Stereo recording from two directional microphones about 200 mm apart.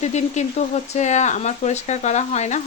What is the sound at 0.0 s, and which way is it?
Speech, 35° left (ahead or behind).